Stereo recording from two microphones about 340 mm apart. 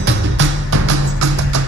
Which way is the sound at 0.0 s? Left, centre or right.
Right.